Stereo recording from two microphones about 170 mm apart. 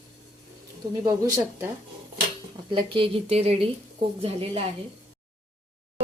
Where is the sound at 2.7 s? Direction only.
30° right (ahead or behind).